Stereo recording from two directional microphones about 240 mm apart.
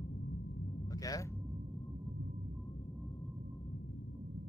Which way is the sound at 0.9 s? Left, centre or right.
Centre.